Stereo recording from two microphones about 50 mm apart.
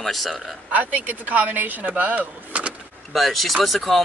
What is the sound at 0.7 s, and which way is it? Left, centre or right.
Speech, right.